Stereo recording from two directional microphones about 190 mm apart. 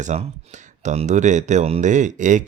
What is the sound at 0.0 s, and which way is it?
Speech, 35° right (ahead or behind).